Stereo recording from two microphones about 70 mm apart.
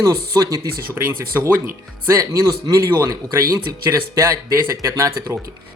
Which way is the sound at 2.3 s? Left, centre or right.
Right.